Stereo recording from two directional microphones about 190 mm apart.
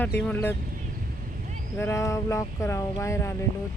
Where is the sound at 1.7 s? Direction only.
15° left (ahead or behind).